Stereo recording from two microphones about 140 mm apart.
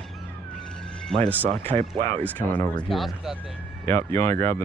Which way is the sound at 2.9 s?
Centre (ahead or behind).